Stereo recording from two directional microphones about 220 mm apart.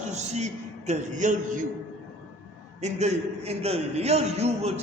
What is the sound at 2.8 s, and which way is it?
A man's voice, 30° right (ahead or behind).